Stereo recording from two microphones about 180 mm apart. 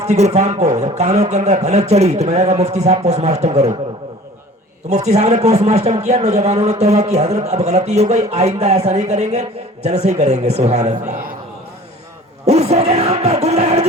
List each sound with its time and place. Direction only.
0.0 s a man's voice: 35° right (ahead or behind)
4.9 s a man's voice: 35° right (ahead or behind)
12.5 s a sound: 35° right (ahead or behind)